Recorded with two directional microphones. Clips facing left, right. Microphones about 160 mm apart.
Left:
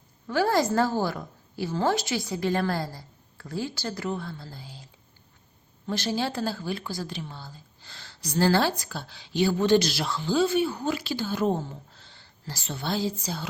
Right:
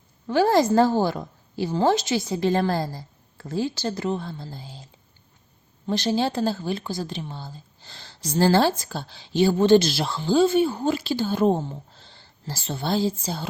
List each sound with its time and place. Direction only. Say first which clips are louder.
0.3 s speech: right 5 dB; 25° right (ahead or behind)
5.9 s speech: right 5 dB; 25° right (ahead or behind)